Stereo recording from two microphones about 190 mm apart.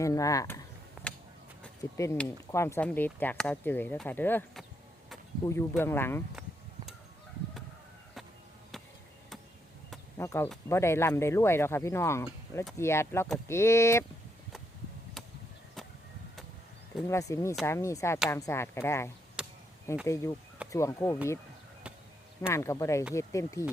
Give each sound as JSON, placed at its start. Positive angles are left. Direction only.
{"t": 0.0, "sound": "speech", "side_deg": 15}
{"t": 1.1, "sound": "a sound", "side_deg": 5}
{"t": 1.8, "sound": "speech", "side_deg": 15}
{"t": 10.2, "sound": "speech", "side_deg": 15}
{"t": 17.0, "sound": "speech", "side_deg": 15}
{"t": 19.4, "sound": "chop", "side_deg": -5}
{"t": 19.9, "sound": "speech", "side_deg": 15}
{"t": 22.4, "sound": "speech", "side_deg": 15}